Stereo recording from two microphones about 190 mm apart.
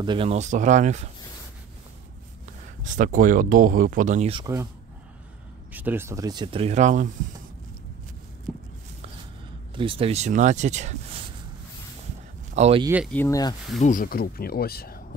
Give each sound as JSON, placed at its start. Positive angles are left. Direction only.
{"t": 0.0, "sound": "speech", "side_deg": -25}
{"t": 2.4, "sound": "speech", "side_deg": -40}
{"t": 4.5, "sound": "speech", "side_deg": -15}
{"t": 5.7, "sound": "speech", "side_deg": -10}
{"t": 8.5, "sound": "walk", "side_deg": 0}
{"t": 9.8, "sound": "speech", "side_deg": -30}
{"t": 12.5, "sound": "speech", "side_deg": -35}
{"t": 13.0, "sound": "speech", "side_deg": 10}
{"t": 13.7, "sound": "speech", "side_deg": 45}